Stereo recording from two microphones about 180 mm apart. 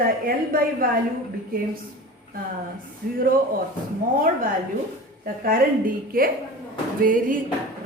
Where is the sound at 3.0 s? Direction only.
55° right (ahead or behind).